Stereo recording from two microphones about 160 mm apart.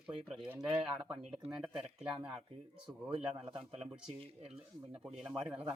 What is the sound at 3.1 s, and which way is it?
Speech, 35° right (ahead or behind).